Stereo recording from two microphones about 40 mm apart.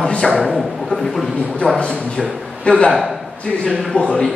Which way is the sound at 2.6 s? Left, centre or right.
Left.